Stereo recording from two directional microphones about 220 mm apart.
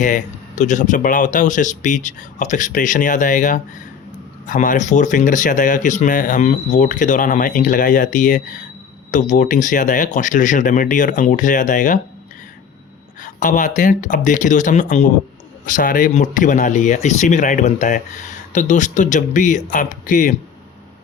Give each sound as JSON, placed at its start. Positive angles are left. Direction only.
{"t": 0.0, "sound": "speech", "side_deg": 35}
{"t": 13.2, "sound": "speech", "side_deg": 35}